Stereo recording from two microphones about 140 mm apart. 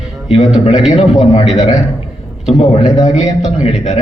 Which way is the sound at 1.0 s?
50° left (ahead or behind).